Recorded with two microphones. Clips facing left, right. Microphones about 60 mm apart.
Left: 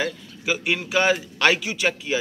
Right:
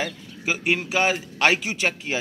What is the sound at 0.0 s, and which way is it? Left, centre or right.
A man's voice, right.